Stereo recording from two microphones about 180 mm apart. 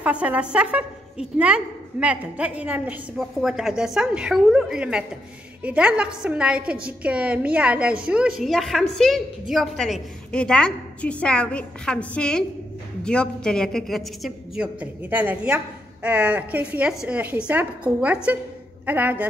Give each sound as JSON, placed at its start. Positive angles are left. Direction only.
{"t": 0.0, "sound": "a woman's voice", "side_deg": -5}